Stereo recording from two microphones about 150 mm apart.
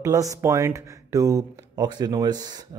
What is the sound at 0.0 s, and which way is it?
Speech, 20° right (ahead or behind).